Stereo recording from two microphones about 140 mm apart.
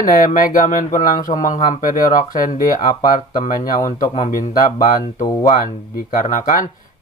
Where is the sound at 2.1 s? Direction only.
80° left.